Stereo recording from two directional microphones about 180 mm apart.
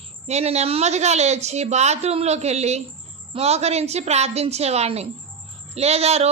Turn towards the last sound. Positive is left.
turn(degrees=-35)  # may be behind; listen again after turning